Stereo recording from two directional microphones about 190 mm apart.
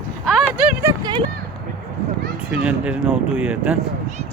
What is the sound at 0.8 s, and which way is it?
Clip-clop, 25° right (ahead or behind).